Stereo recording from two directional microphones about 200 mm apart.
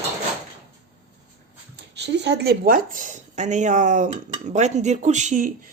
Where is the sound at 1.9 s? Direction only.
60° right (ahead or behind).